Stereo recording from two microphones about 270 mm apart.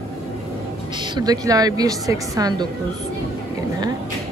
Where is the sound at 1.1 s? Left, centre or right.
Centre.